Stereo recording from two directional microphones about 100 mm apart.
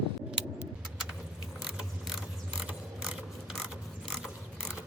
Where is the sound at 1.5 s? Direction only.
10° right (ahead or behind).